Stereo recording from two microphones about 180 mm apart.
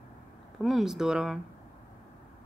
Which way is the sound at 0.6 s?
Centre (ahead or behind).